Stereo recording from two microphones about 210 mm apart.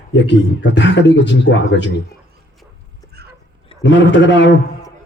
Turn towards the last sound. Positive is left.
turn(degrees=60)  # may be behind; listen again after turning